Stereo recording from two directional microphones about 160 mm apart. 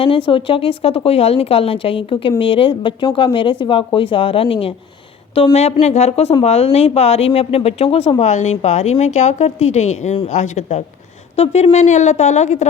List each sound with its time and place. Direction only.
0.0 s a woman's voice: 35° left (ahead or behind)